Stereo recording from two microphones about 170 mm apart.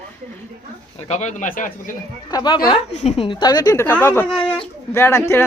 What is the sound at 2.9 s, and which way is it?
A woman's voice, 40° left (ahead or behind).